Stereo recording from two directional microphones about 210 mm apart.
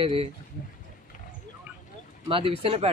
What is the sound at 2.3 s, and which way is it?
Speech, 25° right (ahead or behind).